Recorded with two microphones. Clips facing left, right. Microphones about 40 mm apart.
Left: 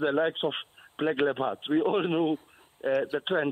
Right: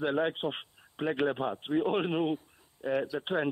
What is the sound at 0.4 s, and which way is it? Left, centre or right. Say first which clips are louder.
A man's voice: left 4 dB; left.